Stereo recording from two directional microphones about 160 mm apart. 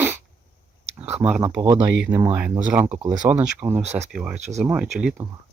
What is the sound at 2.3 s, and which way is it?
Speech, 10° right (ahead or behind).